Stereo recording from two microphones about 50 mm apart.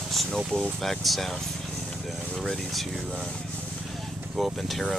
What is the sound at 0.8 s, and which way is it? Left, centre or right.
Speech, centre.